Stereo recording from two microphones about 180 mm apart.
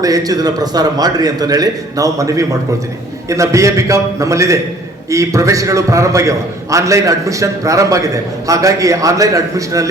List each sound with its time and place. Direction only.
0.0 s a man's voice: 20° right (ahead or behind)